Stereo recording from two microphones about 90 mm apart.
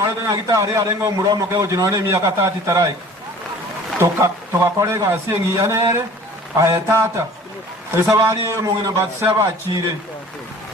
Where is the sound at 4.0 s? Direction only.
35° right (ahead or behind).